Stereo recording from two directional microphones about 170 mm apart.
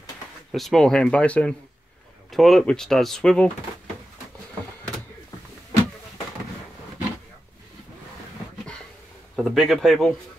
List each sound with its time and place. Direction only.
0.5 s speech: centre (ahead or behind)
9.3 s speech: centre (ahead or behind)